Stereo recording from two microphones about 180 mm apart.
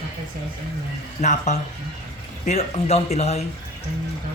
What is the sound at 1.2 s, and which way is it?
Speech, 40° left (ahead or behind).